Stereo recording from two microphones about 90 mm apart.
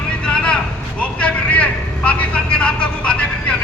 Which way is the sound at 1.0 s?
15° left (ahead or behind).